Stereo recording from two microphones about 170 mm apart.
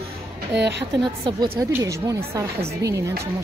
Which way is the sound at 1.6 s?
20° right (ahead or behind).